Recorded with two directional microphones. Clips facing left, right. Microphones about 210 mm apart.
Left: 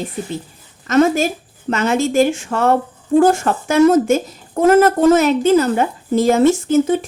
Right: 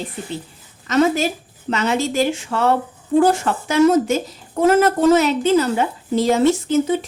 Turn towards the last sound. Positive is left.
turn(degrees=50)  # may be behind; listen again after turning